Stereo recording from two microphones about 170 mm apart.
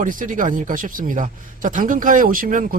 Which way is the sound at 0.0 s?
50° right (ahead or behind).